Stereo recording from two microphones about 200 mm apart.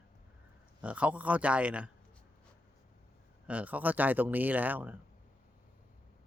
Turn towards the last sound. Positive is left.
turn(degrees=-10)  # may be behind; listen again after turning